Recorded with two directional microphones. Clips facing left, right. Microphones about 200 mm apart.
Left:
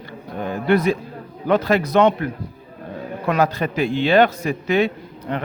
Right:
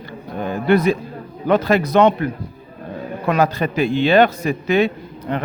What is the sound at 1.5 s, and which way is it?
Speech, 20° right (ahead or behind).